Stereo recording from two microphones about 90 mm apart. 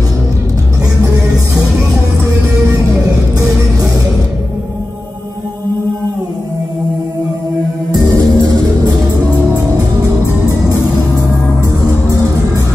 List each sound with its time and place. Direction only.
8.1 s music: 45° right (ahead or behind)
12.1 s music: 40° right (ahead or behind)